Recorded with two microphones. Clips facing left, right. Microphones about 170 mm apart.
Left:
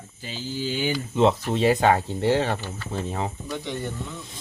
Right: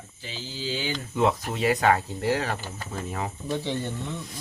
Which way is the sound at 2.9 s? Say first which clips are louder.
Left 3 dB; 25° left (ahead or behind).